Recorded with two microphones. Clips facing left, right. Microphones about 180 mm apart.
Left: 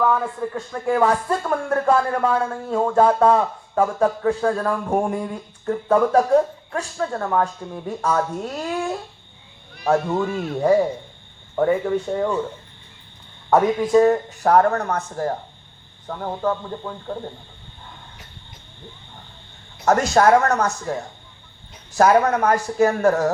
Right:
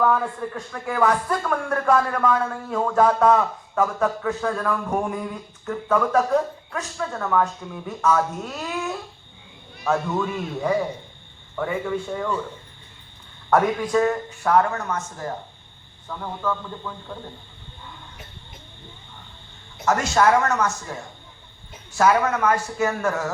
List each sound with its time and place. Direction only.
0.0 s speech: 5° left (ahead or behind)
0.5 s speech: 25° left (ahead or behind)
13.5 s speech: 25° left (ahead or behind)
14.0 s a man's voice: 35° left (ahead or behind)
19.8 s speech: 35° left (ahead or behind)